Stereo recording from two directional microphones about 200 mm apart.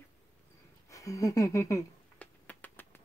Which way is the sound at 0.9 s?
15° left (ahead or behind).